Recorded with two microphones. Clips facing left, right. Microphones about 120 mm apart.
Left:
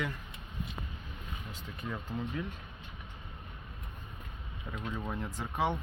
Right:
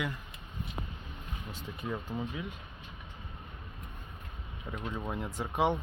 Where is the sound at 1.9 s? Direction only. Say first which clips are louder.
Right 2 dB; 5° right (ahead or behind).